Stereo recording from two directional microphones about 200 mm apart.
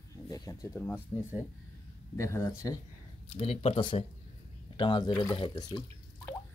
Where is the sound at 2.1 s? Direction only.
15° left (ahead or behind).